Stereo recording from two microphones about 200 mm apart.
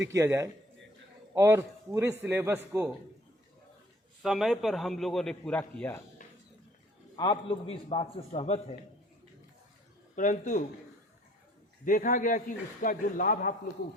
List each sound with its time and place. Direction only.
0.1 s a man's voice: 15° right (ahead or behind)
4.2 s a man's voice: centre (ahead or behind)
7.2 s a man's voice: 25° left (ahead or behind)
10.2 s a man's voice: 40° left (ahead or behind)
11.9 s a man's voice: 40° left (ahead or behind)